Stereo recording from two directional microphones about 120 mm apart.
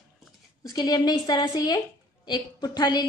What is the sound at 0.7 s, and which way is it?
A woman's voice, 35° left (ahead or behind).